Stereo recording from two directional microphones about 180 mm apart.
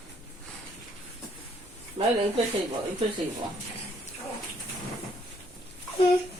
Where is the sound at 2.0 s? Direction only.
35° right (ahead or behind).